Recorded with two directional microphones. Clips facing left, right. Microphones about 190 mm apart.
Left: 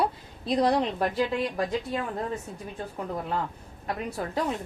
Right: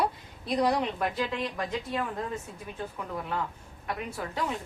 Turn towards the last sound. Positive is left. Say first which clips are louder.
# left 4 dB
turn(degrees=35)  # may be behind; listen again after turning